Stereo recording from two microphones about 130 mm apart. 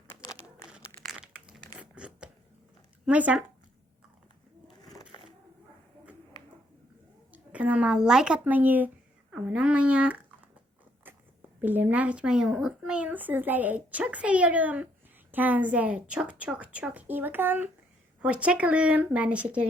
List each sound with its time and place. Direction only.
1.0 s crumpling: 5° right (ahead or behind)
1.7 s a sound: 10° right (ahead or behind)
3.1 s speech: 10° right (ahead or behind)
4.8 s a sound: 30° left (ahead or behind)
7.3 s a woman's voice: 10° right (ahead or behind)
11.6 s speech: 15° right (ahead or behind)